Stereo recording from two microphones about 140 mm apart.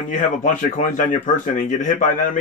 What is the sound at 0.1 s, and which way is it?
Speech, 70° left (ahead or behind).